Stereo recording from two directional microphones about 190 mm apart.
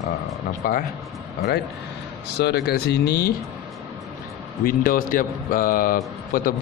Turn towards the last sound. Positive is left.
turn(degrees=45)  # may be behind; listen again after turning